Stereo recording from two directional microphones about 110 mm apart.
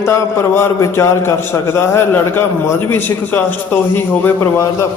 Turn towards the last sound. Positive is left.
turn(degrees=25)  # may be behind; listen again after turning